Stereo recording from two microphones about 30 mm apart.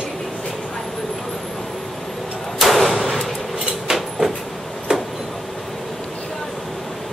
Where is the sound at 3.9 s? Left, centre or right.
Centre.